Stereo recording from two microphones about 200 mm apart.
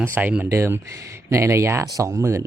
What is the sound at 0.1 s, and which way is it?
Speech, 10° right (ahead or behind).